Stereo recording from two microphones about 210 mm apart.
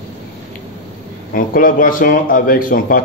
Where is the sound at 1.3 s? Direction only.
40° left (ahead or behind).